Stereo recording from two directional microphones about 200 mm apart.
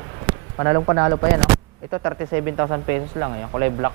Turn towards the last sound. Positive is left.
turn(degrees=-20)  # may be behind; listen again after turning